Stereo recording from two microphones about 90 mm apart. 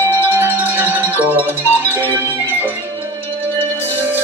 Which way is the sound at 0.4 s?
20° right (ahead or behind).